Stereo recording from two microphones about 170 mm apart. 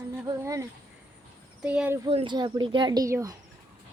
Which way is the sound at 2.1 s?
30° right (ahead or behind).